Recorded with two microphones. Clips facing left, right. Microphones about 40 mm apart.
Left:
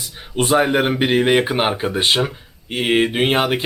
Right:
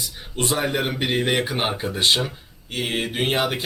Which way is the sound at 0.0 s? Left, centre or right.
Left.